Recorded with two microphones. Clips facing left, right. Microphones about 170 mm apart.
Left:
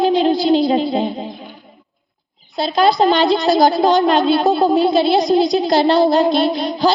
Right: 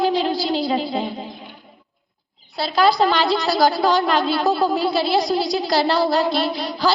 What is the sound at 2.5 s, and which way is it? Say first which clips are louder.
A woman's voice: left 3 dB; 20° left (ahead or behind).